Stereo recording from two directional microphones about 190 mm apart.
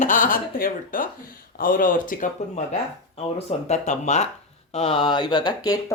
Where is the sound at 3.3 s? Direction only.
35° left (ahead or behind); by 5.8 s 20° left (ahead or behind).